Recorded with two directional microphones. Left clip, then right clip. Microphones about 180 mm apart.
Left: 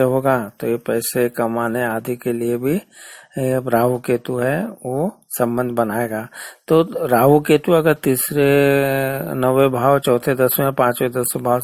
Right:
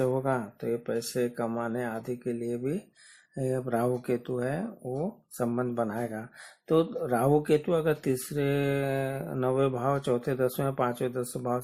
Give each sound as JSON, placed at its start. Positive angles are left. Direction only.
{"t": 0.0, "sound": "speech", "side_deg": 35}